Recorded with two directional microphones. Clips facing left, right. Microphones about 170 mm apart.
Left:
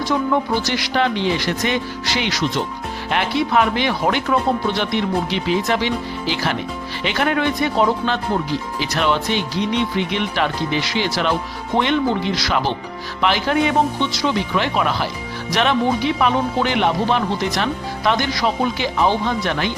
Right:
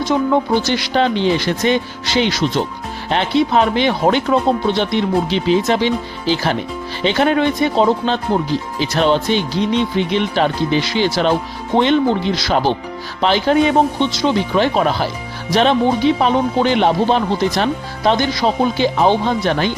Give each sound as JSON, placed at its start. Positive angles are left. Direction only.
{"t": 0.6, "sound": "speech", "side_deg": -25}